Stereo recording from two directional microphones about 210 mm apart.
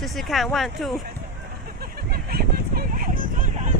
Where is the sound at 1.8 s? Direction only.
45° right (ahead or behind).